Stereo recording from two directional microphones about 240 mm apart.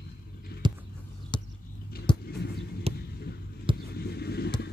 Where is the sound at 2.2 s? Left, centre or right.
Left.